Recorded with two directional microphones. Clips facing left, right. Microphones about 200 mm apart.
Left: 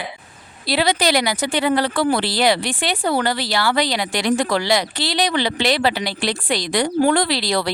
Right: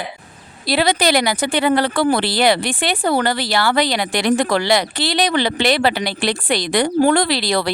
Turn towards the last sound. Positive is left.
turn(degrees=-55)  # may be behind; listen again after turning